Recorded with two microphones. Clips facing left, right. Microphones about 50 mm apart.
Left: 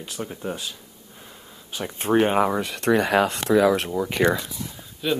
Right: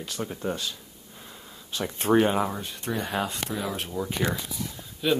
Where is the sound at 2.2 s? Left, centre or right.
Left.